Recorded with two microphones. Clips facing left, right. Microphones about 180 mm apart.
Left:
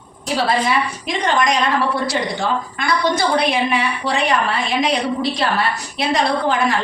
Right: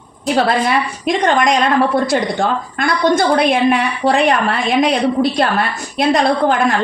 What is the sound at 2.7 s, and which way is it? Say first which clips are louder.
A woman's voice: right 7 dB; 50° right (ahead or behind).